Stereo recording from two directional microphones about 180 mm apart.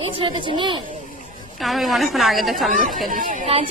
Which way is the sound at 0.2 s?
25° right (ahead or behind).